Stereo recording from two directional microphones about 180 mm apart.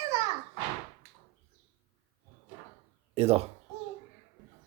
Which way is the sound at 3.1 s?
35° right (ahead or behind).